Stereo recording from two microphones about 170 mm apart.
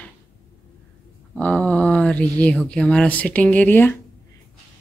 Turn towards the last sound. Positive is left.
turn(degrees=10)  # may be behind; listen again after turning